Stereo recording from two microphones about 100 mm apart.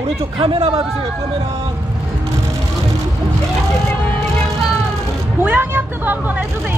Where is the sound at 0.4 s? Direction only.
60° right (ahead or behind).